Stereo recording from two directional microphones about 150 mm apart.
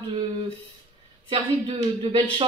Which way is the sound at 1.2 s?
35° right (ahead or behind).